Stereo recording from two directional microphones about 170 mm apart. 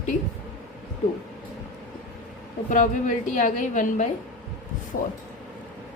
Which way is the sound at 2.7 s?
50° left (ahead or behind).